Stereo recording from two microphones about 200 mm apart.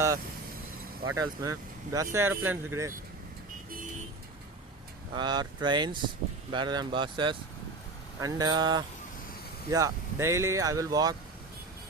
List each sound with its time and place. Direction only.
1.1 s speech: 15° right (ahead or behind)
5.1 s speech: 20° right (ahead or behind)